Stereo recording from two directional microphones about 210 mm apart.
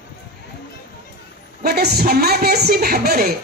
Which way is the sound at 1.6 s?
50° right (ahead or behind).